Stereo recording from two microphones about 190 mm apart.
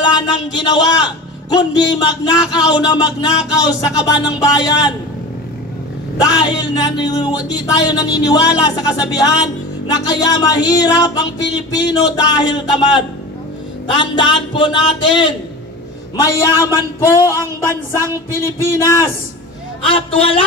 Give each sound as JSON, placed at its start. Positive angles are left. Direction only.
{"t": 0.0, "sound": "a sound", "side_deg": 25}
{"t": 1.5, "sound": "speech", "side_deg": 20}
{"t": 6.2, "sound": "speech", "side_deg": 20}
{"t": 19.9, "sound": "speech", "side_deg": 30}